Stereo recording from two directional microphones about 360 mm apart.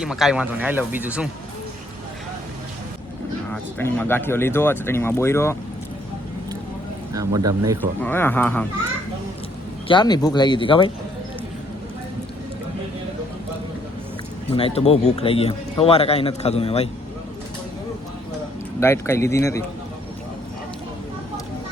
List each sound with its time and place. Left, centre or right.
0.0 s speech: centre
3.5 s a man's voice: centre
7.1 s speech: centre
8.0 s speech: centre
9.9 s a man's voice: centre
14.5 s a man's voice: centre
18.8 s a man's voice: centre